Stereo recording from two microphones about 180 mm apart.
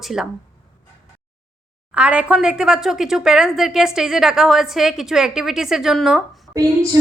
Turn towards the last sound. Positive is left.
turn(degrees=-20)  # may be behind; listen again after turning